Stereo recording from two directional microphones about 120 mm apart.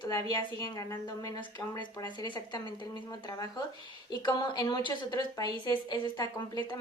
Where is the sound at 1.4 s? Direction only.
40° left (ahead or behind).